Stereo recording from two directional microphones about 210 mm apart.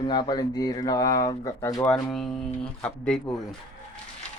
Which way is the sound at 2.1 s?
Centre (ahead or behind).